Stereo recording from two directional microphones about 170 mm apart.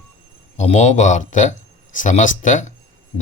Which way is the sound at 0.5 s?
45° left (ahead or behind).